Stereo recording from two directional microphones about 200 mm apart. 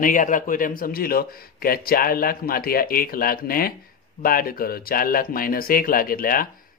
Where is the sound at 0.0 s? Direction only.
40° left (ahead or behind).